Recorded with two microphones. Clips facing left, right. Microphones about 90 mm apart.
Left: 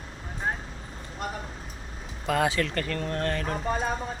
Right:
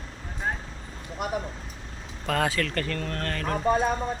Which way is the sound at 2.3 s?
15° left (ahead or behind).